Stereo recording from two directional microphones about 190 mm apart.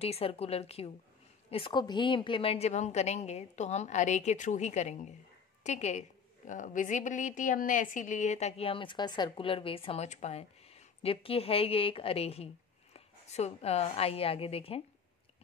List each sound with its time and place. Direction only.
0.0 s a woman's voice: 30° left (ahead or behind)